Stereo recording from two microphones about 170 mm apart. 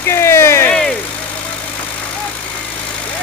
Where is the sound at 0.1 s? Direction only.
15° left (ahead or behind).